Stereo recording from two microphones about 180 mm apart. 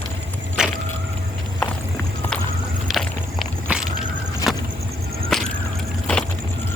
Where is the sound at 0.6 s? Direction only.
5° right (ahead or behind).